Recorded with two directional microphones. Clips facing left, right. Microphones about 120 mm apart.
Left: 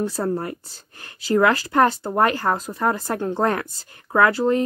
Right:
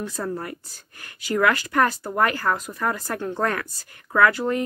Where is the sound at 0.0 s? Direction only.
30° left (ahead or behind).